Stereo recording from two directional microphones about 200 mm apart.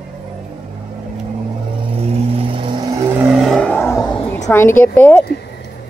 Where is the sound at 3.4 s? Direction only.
5° left (ahead or behind).